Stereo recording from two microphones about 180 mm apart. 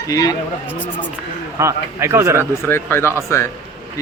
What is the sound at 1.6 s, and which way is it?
Speech, 15° right (ahead or behind).